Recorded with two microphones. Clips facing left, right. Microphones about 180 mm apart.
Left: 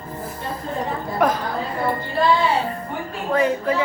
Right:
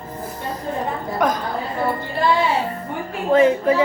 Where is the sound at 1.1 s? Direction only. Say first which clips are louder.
Left 1 dB; centre (ahead or behind).